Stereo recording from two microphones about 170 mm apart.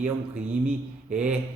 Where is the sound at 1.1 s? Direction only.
5° right (ahead or behind).